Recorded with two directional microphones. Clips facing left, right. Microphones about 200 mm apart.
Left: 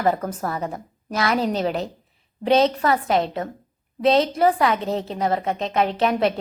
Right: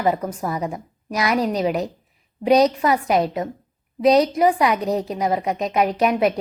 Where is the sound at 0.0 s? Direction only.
10° right (ahead or behind).